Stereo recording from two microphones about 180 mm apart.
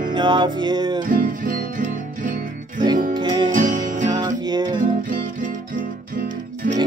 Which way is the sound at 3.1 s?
25° right (ahead or behind).